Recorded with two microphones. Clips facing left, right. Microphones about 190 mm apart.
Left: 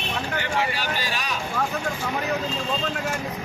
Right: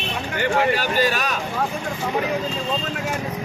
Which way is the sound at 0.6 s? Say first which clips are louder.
Right 8 dB; 50° right (ahead or behind).